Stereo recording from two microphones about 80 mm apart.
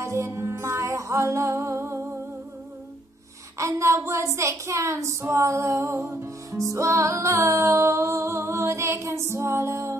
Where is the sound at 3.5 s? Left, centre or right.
Right.